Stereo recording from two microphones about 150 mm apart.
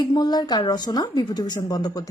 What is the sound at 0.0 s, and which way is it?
A woman's voice, 30° left (ahead or behind).